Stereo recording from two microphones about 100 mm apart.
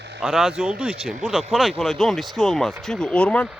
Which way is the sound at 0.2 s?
5° right (ahead or behind).